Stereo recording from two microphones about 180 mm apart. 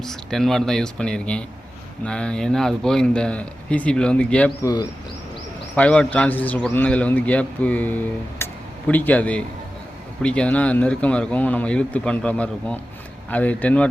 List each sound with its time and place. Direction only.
0.0 s speech: centre (ahead or behind)
4.6 s speech: 20° left (ahead or behind)
5.7 s a man's voice: 5° left (ahead or behind)